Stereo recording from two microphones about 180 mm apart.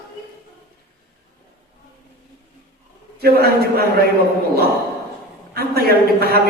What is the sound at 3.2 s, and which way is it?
Speech, 60° right (ahead or behind).